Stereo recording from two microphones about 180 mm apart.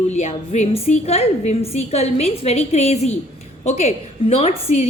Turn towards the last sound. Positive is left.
turn(degrees=35)  # may be behind; listen again after turning